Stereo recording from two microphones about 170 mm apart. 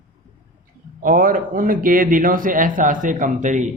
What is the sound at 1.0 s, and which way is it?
A man's voice, 55° right (ahead or behind).